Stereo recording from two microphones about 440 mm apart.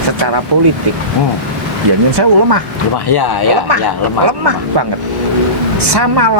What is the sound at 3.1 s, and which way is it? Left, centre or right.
Chicken, left.